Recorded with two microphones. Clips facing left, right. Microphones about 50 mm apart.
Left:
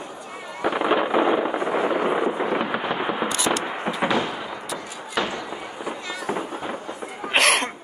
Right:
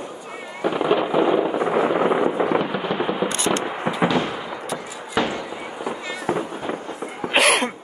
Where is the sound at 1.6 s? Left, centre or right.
Centre.